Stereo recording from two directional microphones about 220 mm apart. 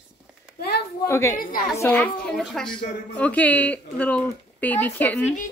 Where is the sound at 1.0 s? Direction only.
10° left (ahead or behind).